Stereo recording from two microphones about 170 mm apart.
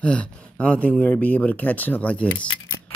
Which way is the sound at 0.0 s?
5° left (ahead or behind).